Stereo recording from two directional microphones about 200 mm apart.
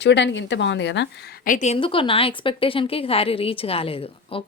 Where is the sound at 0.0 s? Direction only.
60° left (ahead or behind).